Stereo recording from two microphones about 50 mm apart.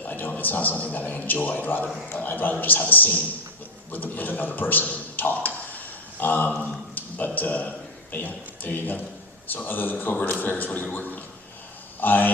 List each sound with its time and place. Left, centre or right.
0.0 s a man's voice: left
5.7 s a sound: left
7.3 s a man's voice: left
11.9 s a man's voice: left